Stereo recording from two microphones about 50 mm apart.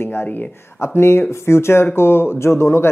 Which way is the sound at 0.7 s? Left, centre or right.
Left.